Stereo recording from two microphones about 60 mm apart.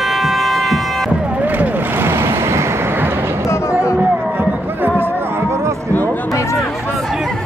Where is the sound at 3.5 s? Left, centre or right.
Left.